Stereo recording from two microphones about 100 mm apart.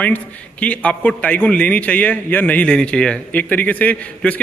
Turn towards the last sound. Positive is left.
turn(degrees=15)  # may be behind; listen again after turning